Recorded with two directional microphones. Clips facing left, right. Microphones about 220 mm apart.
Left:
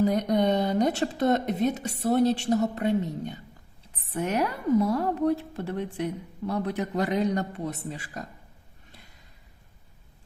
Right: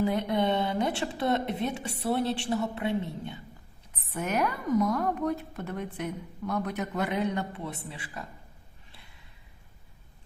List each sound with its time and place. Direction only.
0.0 s a woman's voice: 40° left (ahead or behind)
3.9 s a woman's voice: 30° left (ahead or behind)
8.9 s a sound: 45° left (ahead or behind)